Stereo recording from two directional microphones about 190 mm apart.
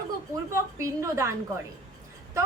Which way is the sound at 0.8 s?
15° right (ahead or behind).